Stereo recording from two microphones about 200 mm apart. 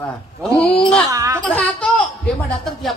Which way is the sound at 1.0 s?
15° right (ahead or behind).